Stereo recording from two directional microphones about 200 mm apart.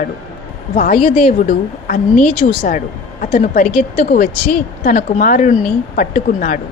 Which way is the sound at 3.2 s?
45° left (ahead or behind).